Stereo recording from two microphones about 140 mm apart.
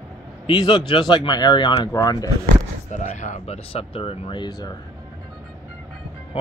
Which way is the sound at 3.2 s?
55° left (ahead or behind).